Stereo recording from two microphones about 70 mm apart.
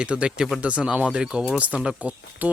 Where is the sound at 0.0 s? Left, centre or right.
Centre.